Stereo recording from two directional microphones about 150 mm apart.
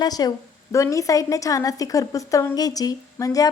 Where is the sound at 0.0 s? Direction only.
25° left (ahead or behind).